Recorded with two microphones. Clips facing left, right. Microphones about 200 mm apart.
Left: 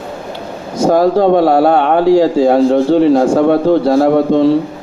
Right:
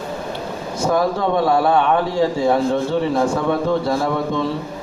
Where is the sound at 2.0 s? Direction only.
85° left.